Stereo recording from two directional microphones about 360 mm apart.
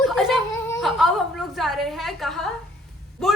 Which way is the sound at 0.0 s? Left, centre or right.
Centre.